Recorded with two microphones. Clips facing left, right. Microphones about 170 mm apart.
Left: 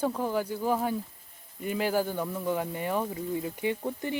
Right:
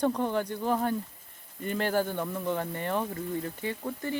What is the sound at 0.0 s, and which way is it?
Speech, 5° left (ahead or behind).